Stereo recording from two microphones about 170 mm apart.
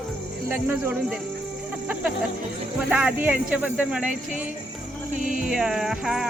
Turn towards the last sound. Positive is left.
turn(degrees=0)  # may be behind; listen again after turning